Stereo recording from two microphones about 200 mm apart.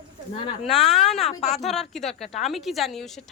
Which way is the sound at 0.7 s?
Centre (ahead or behind).